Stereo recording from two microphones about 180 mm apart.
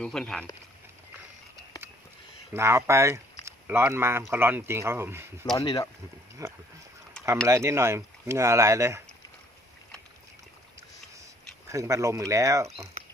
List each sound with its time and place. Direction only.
0.0 s speech: 5° left (ahead or behind)
2.5 s speech: 15° right (ahead or behind)
5.5 s speech: 20° left (ahead or behind)
6.4 s speech: 20° right (ahead or behind)
11.7 s speech: 15° right (ahead or behind)